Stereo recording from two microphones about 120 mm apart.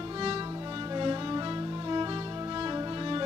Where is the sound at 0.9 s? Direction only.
40° right (ahead or behind).